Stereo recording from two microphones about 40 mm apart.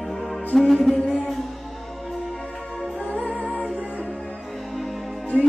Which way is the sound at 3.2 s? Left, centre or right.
Left.